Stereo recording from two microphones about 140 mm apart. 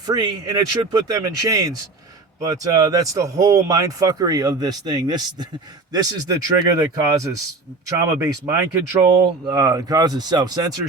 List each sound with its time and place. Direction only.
0.0 s speech: 30° right (ahead or behind)